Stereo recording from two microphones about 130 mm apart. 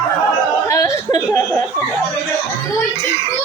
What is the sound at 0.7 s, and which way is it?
Speech, 25° left (ahead or behind).